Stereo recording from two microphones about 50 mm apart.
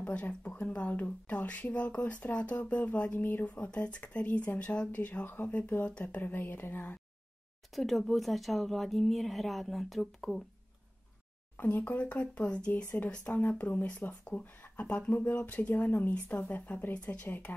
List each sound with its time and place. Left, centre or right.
0.0 s speech: left
3.4 s speech: left
5.2 s speech: left
7.7 s speech: centre
11.5 s speech: left
13.3 s speech: left
15.7 s speech: left
16.9 s speech: left
17.5 s speech: left